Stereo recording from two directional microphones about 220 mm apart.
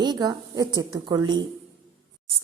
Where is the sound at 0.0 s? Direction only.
20° right (ahead or behind).